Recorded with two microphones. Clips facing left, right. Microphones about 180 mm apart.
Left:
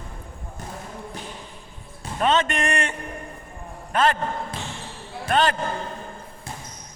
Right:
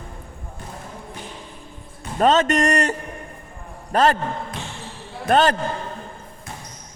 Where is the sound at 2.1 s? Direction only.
40° right (ahead or behind).